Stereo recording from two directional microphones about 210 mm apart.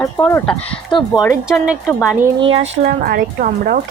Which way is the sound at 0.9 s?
20° left (ahead or behind).